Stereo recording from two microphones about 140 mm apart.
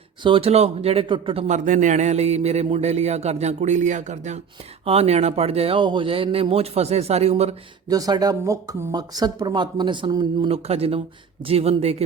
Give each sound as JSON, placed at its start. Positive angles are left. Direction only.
{"t": 0.2, "sound": "speech", "side_deg": -40}
{"t": 1.5, "sound": "a man's voice", "side_deg": -65}
{"t": 7.9, "sound": "speech", "side_deg": -25}
{"t": 10.5, "sound": "a man's voice", "side_deg": -45}